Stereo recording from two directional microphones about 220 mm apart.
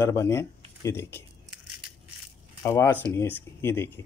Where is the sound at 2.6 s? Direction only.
10° left (ahead or behind).